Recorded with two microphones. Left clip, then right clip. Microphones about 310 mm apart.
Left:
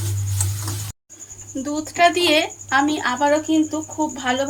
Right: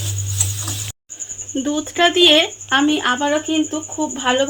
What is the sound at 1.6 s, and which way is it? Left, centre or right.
Speech, right.